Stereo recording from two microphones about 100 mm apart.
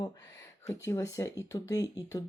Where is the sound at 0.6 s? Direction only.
25° left (ahead or behind).